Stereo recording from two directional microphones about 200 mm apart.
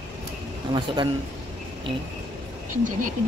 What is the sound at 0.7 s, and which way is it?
Speech, 25° right (ahead or behind).